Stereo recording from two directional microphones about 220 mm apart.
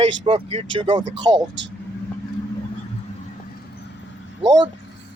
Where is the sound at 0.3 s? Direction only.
25° right (ahead or behind).